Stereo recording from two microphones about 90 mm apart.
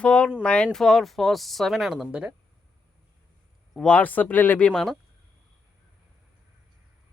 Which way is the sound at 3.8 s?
15° left (ahead or behind).